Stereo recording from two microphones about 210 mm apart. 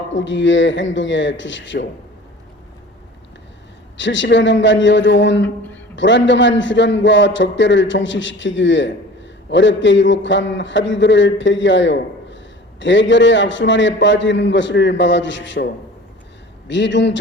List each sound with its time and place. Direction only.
0.1 s a man's voice: 60° left (ahead or behind)
3.9 s a man's voice: 60° left (ahead or behind)